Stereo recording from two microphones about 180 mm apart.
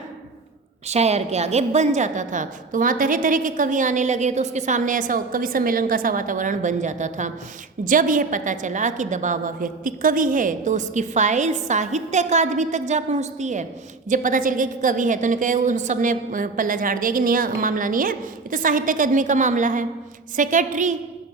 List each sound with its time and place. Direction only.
0.9 s a woman's voice: 35° right (ahead or behind)